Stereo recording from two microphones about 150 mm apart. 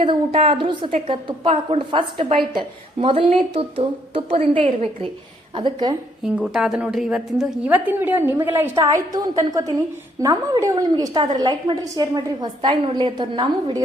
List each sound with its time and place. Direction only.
0.0 s a woman's voice: 35° right (ahead or behind)
5.5 s a woman's voice: 30° right (ahead or behind)
6.2 s a woman's voice: 5° right (ahead or behind); by 13.8 s 35° right (ahead or behind)